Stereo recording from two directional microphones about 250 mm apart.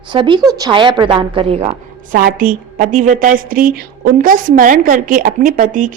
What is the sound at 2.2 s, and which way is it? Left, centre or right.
A woman's voice, right.